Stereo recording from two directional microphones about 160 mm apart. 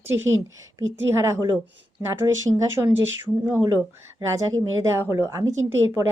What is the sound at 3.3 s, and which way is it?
Speech, centre (ahead or behind).